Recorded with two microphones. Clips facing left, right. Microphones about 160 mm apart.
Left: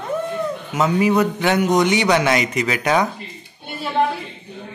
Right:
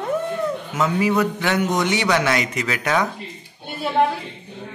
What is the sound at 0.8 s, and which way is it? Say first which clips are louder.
A man's voice: left 3 dB; 20° left (ahead or behind).